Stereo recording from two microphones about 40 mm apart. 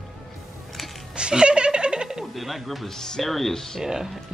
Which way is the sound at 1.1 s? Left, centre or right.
Right.